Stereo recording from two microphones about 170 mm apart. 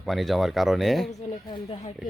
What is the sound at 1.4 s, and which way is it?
Speech, 30° left (ahead or behind).